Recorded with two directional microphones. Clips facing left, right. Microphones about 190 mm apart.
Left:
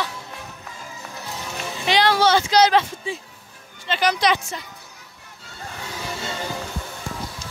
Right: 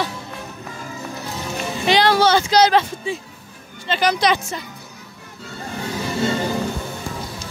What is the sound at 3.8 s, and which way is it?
Speech, 40° right (ahead or behind).